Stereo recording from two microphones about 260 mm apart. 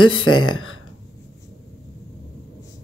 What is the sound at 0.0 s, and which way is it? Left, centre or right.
Speech, left.